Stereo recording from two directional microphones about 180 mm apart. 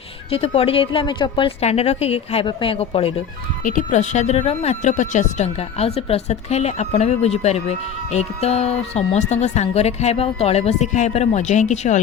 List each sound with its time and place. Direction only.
0.3 s speech: 30° left (ahead or behind)
3.6 s speech: 45° left (ahead or behind)